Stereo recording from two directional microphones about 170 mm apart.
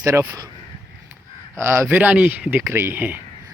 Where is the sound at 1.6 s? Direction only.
15° right (ahead or behind).